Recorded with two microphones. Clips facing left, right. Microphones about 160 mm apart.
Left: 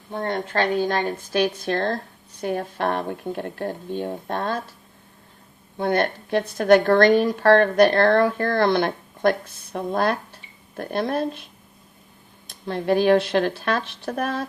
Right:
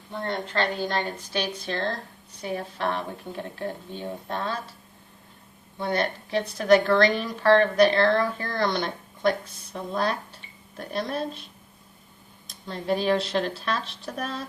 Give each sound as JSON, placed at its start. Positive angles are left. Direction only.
{"t": 0.1, "sound": "a woman's voice", "side_deg": 50}
{"t": 5.7, "sound": "a woman's voice", "side_deg": 50}
{"t": 12.5, "sound": "speech", "side_deg": 60}